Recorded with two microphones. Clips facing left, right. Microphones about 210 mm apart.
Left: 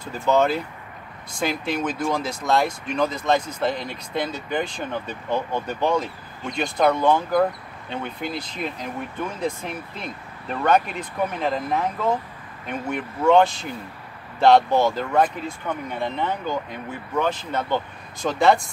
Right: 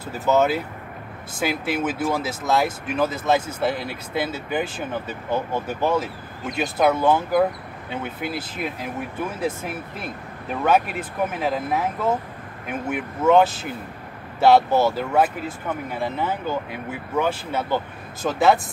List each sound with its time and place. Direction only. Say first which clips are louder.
0.0 s speech: even; 5° right (ahead or behind)